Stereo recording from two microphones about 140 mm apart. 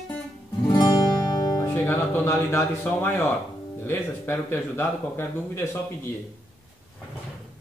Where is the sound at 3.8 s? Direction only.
15° left (ahead or behind).